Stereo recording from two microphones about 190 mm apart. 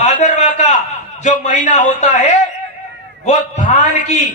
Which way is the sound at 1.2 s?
40° left (ahead or behind).